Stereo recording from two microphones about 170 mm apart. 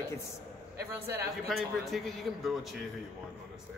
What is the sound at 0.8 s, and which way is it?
Speech, 70° right (ahead or behind).